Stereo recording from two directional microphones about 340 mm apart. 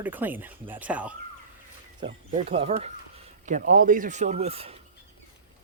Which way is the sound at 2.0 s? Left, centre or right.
Centre.